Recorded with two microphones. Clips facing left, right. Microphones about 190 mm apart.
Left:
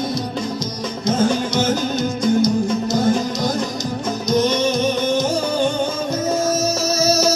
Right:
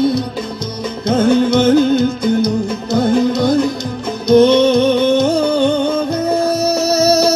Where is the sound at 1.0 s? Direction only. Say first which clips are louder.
Right 6 dB; 60° right (ahead or behind).